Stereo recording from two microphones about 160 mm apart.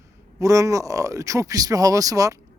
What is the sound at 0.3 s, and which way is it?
Speech, 20° right (ahead or behind).